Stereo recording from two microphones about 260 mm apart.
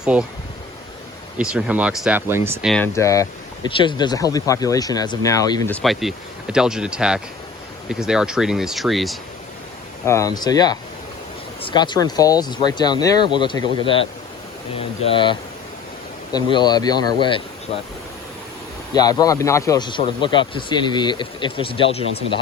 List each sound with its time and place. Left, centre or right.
0.0 s speech: centre
1.4 s speech: centre
10.1 s speech: centre
18.9 s speech: centre